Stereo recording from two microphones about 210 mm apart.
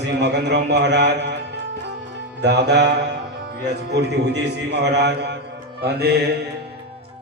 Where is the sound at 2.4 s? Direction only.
55° right (ahead or behind).